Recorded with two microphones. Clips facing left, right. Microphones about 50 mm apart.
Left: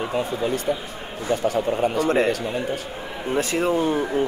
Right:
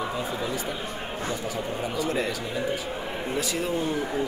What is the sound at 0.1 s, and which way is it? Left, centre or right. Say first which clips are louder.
Speech: left 6 dB; left.